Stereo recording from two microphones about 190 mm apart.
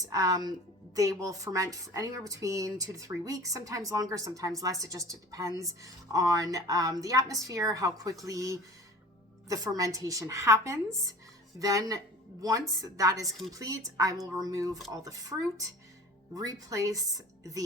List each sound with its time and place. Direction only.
0.0 s a woman's voice: 20° right (ahead or behind)